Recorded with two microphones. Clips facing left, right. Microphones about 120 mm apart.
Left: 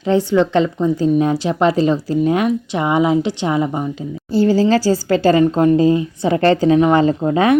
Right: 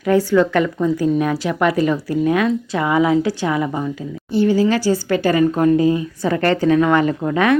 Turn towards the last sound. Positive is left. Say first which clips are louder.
# left 2 dB
turn(degrees=30)  # may be behind; listen again after turning